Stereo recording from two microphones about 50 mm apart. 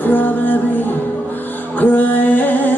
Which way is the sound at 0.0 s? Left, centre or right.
Left.